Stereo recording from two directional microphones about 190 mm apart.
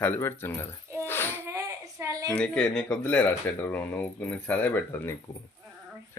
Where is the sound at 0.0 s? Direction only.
10° left (ahead or behind).